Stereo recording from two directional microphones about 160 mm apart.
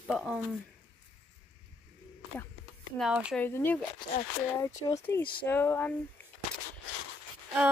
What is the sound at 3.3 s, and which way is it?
Speech, 15° left (ahead or behind).